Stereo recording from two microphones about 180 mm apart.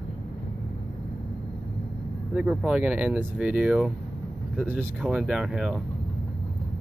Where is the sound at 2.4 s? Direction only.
5° right (ahead or behind).